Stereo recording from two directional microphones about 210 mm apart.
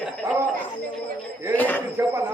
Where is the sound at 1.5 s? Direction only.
10° left (ahead or behind).